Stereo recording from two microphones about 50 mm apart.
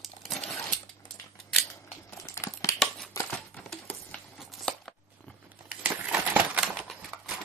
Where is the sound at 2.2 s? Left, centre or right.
Left.